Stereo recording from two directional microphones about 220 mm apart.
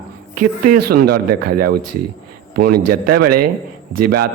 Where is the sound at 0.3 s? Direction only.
40° right (ahead or behind).